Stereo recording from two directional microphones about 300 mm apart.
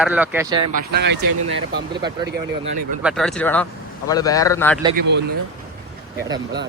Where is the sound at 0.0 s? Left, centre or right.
Centre.